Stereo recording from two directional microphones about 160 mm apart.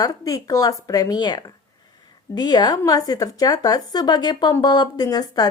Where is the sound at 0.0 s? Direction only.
20° left (ahead or behind).